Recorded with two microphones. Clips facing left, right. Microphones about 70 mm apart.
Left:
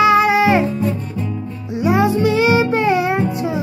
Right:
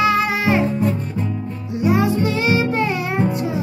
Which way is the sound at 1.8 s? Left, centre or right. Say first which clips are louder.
Left 3 dB; centre.